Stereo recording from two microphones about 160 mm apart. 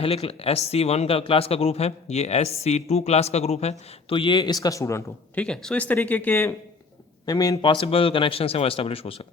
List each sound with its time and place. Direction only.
0.0 s speech: 40° left (ahead or behind)